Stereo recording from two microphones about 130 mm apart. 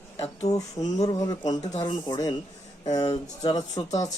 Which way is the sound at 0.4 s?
30° left (ahead or behind).